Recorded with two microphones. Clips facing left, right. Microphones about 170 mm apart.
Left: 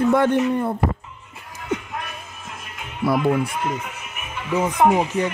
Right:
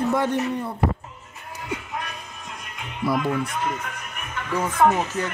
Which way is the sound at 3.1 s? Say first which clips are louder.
Left 3 dB; 65° left (ahead or behind).